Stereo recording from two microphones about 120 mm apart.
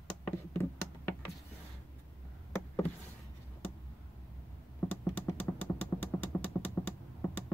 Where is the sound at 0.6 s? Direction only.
20° left (ahead or behind).